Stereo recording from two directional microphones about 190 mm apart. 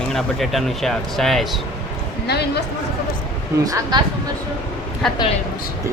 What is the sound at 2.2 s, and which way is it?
Speech, 60° left (ahead or behind).